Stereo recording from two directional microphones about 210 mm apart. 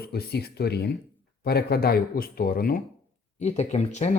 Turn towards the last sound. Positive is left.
turn(degrees=30)  # may be behind; listen again after turning